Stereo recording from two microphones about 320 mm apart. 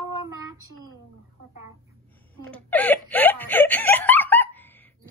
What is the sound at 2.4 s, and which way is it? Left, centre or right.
Snicker, centre.